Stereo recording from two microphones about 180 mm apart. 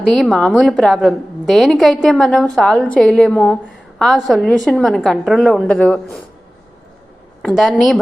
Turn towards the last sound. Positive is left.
turn(degrees=0)  # may be behind; listen again after turning